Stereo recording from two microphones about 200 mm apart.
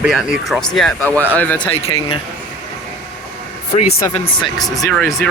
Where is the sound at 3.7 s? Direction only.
35° left (ahead or behind).